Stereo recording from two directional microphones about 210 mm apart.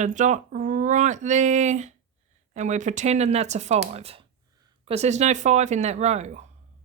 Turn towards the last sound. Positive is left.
turn(degrees=-35)  # may be behind; listen again after turning